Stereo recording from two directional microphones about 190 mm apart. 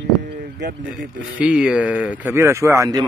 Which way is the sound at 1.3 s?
5° right (ahead or behind).